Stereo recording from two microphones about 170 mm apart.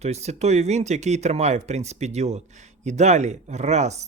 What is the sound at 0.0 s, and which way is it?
Speech, 40° right (ahead or behind).